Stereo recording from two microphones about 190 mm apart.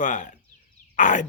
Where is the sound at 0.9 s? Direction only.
40° left (ahead or behind).